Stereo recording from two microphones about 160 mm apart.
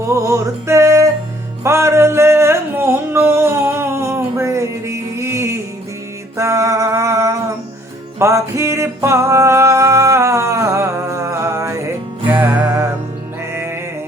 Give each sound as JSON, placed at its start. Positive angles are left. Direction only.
{"t": 0.1, "sound": "music", "side_deg": -20}
{"t": 6.3, "sound": "a sound", "side_deg": -20}
{"t": 8.2, "sound": "music", "side_deg": -20}